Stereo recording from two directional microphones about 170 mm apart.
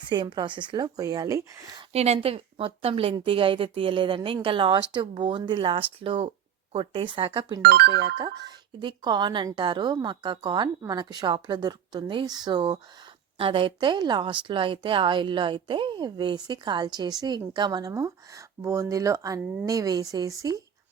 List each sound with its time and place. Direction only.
0.1 s a woman's voice: 25° right (ahead or behind)
1.9 s a woman's voice: 35° right (ahead or behind)
7.6 s speech: 70° right (ahead or behind); by 8.1 s 90° right
8.2 s a woman's voice: 25° right (ahead or behind)